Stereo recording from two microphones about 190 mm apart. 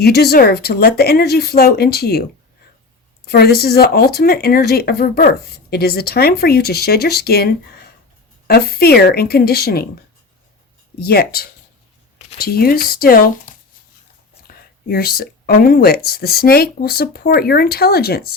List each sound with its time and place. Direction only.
0.0 s speech: 55° left (ahead or behind)
3.2 s speech: 55° left (ahead or behind)
11.0 s speech: 55° left (ahead or behind)
14.5 s speech: 50° left (ahead or behind)